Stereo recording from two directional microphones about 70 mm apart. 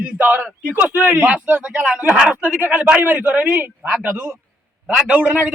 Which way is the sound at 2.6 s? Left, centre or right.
Right.